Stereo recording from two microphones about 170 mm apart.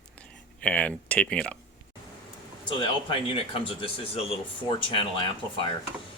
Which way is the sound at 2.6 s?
30° left (ahead or behind).